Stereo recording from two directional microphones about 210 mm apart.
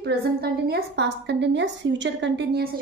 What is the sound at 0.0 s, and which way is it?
A woman's voice, 50° right (ahead or behind).